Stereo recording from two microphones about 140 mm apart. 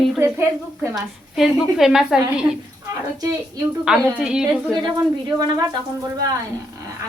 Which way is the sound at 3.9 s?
5° right (ahead or behind).